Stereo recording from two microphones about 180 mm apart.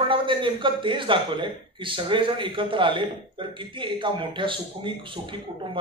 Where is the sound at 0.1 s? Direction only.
25° right (ahead or behind).